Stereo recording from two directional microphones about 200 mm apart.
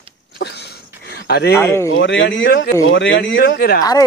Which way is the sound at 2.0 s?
65° left (ahead or behind).